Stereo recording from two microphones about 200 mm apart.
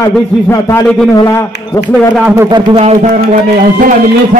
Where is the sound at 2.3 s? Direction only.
20° right (ahead or behind).